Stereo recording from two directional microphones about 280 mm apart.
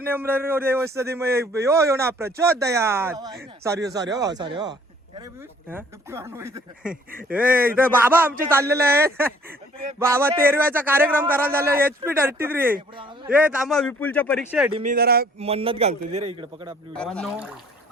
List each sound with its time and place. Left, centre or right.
0.0 s a man's voice: centre
14.7 s a man's voice: right
14.9 s speech: right
15.4 s a man's voice: right
16.9 s a man's voice: centre